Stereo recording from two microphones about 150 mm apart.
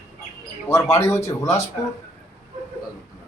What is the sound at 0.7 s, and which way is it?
Speech, 20° left (ahead or behind).